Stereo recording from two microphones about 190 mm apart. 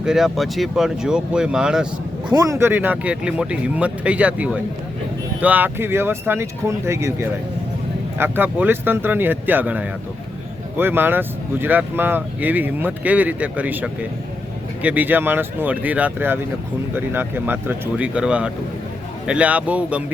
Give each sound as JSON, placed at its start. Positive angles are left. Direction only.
{"t": 0.0, "sound": "speech", "side_deg": 0}
{"t": 2.3, "sound": "speech", "side_deg": -20}